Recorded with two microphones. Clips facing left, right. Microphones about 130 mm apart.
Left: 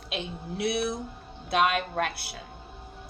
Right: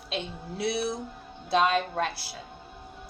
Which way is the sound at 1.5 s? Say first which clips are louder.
Right 1 dB; 30° right (ahead or behind).